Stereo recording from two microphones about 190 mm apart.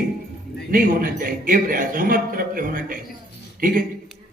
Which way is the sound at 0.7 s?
50° right (ahead or behind).